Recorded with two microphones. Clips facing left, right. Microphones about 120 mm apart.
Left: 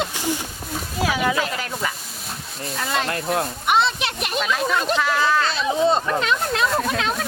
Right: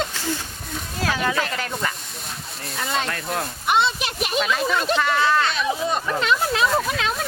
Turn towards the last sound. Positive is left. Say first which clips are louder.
# left 1 dB
turn(degrees=0)  # may be behind; listen again after turning